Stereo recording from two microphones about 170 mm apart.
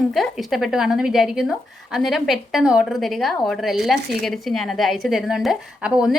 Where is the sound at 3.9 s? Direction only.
70° right (ahead or behind).